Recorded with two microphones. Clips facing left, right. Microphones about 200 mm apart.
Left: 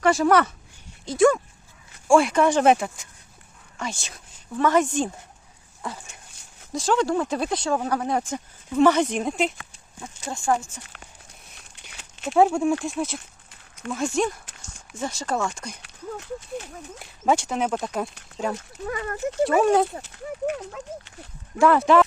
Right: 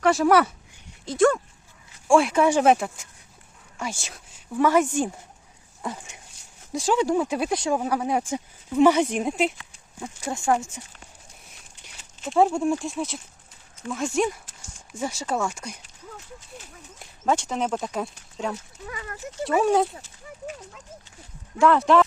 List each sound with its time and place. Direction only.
0.0 s speech: centre (ahead or behind)
1.0 s a woman's voice: 5° left (ahead or behind)
5.8 s speech: 20° right (ahead or behind)
10.2 s speech: 20° right (ahead or behind)
11.5 s a sound: 70° left (ahead or behind)
12.3 s speech: centre (ahead or behind)
15.8 s a sound: 75° left (ahead or behind)
17.0 s speech: 10° left (ahead or behind)
18.9 s speech: 55° left (ahead or behind)
19.5 s speech: centre (ahead or behind)
19.9 s speech: 65° left (ahead or behind)
21.6 s speech: 5° left (ahead or behind)